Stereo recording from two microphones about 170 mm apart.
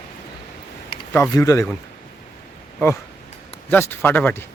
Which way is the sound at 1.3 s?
20° left (ahead or behind).